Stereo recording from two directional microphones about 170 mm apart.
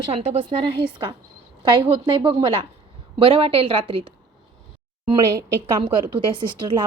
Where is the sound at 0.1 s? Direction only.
35° right (ahead or behind).